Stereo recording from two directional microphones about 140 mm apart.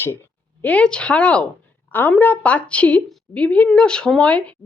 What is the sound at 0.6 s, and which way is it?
A woman's voice, 10° left (ahead or behind).